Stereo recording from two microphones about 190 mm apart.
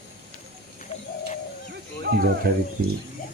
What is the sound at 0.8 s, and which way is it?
Bird, 40° left (ahead or behind).